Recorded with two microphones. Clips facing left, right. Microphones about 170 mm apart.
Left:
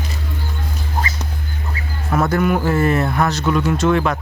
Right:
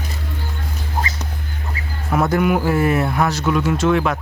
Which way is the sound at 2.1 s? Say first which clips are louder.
Even; 15° right (ahead or behind).